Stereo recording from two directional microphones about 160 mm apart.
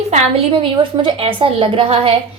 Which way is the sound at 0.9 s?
35° right (ahead or behind).